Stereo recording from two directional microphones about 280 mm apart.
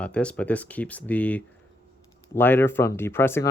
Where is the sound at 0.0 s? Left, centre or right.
Centre.